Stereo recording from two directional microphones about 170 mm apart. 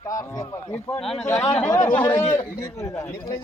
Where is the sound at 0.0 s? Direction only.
20° left (ahead or behind).